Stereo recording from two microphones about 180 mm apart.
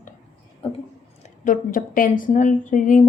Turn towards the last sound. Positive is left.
turn(degrees=45)  # may be behind; listen again after turning